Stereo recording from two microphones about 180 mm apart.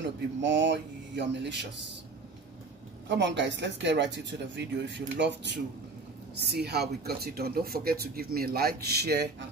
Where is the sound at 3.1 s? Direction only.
80° right.